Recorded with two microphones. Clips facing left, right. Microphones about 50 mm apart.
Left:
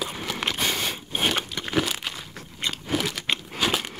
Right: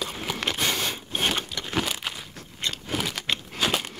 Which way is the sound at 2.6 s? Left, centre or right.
Centre.